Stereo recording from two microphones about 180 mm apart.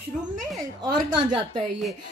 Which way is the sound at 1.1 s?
25° right (ahead or behind).